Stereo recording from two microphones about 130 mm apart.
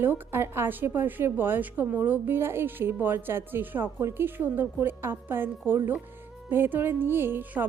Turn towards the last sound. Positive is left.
turn(degrees=-15)  # may be behind; listen again after turning